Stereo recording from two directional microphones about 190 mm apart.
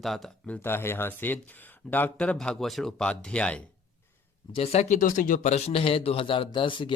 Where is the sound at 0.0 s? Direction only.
Centre (ahead or behind).